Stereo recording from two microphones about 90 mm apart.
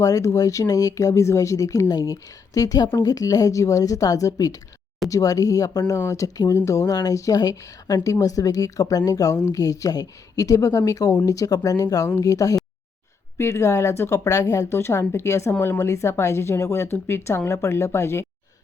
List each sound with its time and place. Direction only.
0.0 s a woman's voice: 35° left (ahead or behind)